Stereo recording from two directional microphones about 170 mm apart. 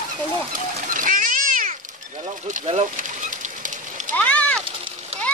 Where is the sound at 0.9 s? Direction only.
50° right (ahead or behind).